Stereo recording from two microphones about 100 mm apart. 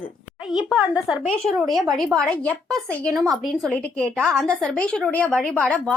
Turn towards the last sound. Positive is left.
turn(degrees=10)  # may be behind; listen again after turning